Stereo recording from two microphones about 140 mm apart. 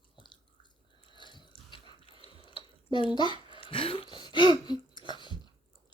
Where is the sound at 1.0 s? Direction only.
35° left (ahead or behind).